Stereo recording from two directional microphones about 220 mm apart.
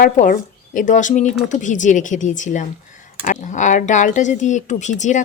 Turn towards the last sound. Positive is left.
turn(degrees=35)  # may be behind; listen again after turning